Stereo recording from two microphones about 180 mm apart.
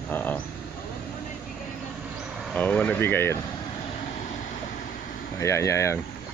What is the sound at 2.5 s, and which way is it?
Speech, 5° left (ahead or behind).